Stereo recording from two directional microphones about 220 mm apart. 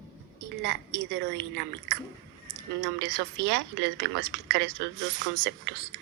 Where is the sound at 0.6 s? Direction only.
50° right (ahead or behind).